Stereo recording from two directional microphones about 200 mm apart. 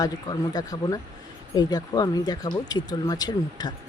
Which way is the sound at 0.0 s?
20° left (ahead or behind).